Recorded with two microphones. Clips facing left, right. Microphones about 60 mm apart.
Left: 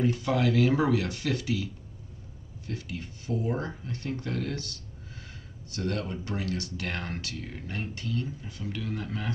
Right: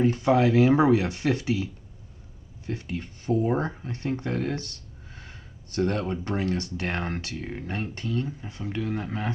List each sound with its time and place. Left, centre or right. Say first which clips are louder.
0.0 s speech: right 5 dB; right
5.7 s speech: right 6 dB; right